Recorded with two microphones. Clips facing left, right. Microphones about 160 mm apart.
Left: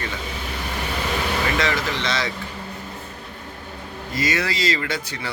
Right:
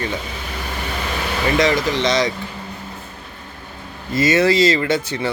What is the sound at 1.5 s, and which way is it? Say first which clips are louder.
Speech: right 6 dB; 15° right (ahead or behind).